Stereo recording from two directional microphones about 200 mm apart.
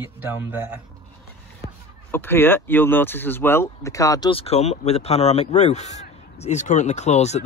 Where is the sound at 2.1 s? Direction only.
10° left (ahead or behind).